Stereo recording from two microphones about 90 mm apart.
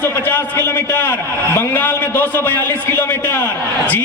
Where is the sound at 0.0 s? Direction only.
25° left (ahead or behind).